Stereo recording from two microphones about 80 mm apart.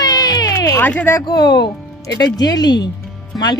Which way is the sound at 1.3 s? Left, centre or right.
Left.